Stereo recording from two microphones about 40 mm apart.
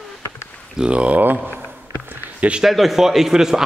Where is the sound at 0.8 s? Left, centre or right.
Right.